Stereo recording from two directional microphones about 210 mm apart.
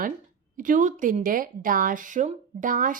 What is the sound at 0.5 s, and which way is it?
Speech, 40° right (ahead or behind).